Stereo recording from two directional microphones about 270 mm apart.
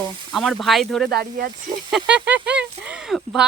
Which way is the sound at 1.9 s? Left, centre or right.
Centre.